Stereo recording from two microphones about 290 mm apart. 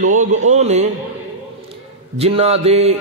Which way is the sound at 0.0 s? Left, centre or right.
Right.